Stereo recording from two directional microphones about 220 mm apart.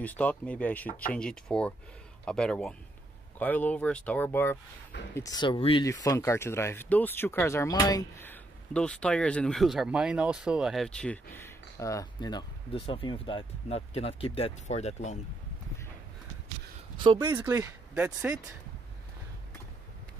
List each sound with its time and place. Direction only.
0.0 s speech: 5° left (ahead or behind); by 15.1 s 30° left (ahead or behind)
17.0 s speech: 20° right (ahead or behind)
17.3 s speech: 10° right (ahead or behind)